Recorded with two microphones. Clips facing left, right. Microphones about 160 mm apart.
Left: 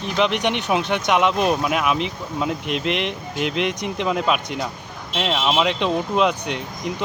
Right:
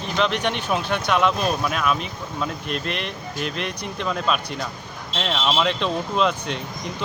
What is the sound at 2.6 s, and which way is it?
Speech, 85° left.